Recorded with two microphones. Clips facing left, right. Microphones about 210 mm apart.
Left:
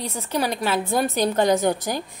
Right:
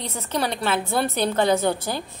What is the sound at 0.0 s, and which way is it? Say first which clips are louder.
A woman's voice: left 1 dB; 10° left (ahead or behind).